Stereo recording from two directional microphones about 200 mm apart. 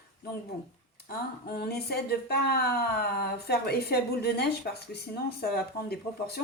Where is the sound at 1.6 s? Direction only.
50° left (ahead or behind).